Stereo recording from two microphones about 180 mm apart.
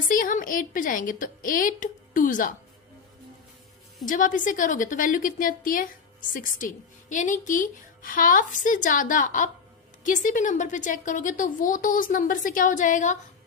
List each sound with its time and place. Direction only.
0.1 s a woman's voice: 50° left (ahead or behind)
4.0 s a woman's voice: 45° left (ahead or behind)